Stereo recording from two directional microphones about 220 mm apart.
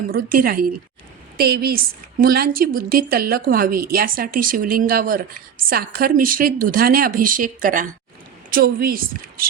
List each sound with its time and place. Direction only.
0.1 s a woman's voice: 40° right (ahead or behind)